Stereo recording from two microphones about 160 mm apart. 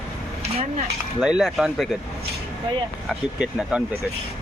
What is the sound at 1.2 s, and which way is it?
Speech, centre (ahead or behind).